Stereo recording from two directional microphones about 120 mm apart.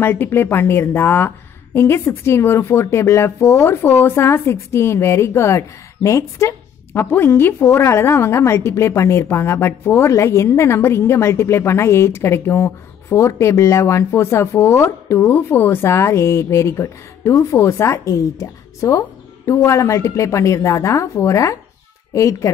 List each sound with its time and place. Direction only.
0.0 s a woman's voice: 20° left (ahead or behind)